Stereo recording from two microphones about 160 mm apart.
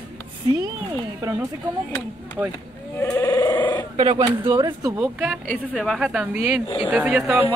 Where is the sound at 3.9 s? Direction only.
30° right (ahead or behind).